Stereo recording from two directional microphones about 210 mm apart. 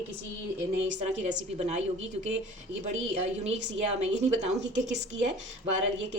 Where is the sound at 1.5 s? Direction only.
35° right (ahead or behind).